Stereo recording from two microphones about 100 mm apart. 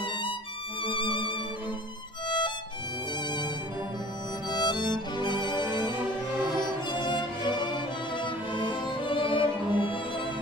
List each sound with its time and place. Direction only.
0.8 s music: 55° left (ahead or behind)
4.5 s music: 45° left (ahead or behind)